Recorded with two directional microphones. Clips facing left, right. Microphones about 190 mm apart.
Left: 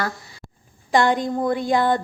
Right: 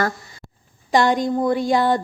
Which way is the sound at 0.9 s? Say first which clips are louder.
Right 1 dB; 20° right (ahead or behind).